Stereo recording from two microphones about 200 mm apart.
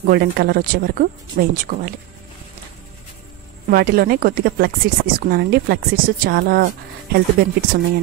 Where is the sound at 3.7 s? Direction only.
50° right (ahead or behind).